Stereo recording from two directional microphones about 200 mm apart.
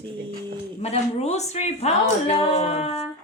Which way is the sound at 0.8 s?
35° left (ahead or behind).